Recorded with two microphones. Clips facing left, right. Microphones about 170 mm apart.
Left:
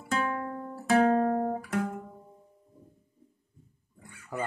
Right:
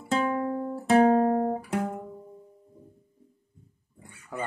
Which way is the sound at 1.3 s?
20° right (ahead or behind).